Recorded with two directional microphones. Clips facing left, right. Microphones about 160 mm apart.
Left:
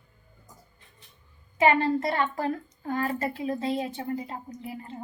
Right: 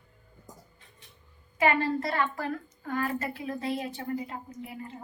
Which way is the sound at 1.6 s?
25° left (ahead or behind).